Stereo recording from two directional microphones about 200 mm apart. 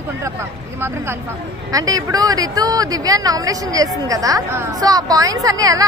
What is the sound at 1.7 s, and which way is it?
Speech, 15° right (ahead or behind).